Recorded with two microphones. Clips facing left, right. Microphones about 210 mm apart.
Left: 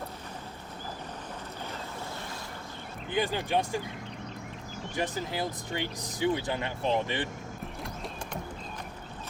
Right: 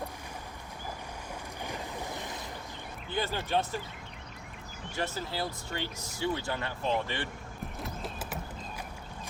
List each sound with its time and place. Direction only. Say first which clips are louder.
3.1 s speech: left 3 dB; 15° left (ahead or behind)
4.9 s speech: left 2 dB; 15° left (ahead or behind)
7.8 s a sound: even; centre (ahead or behind)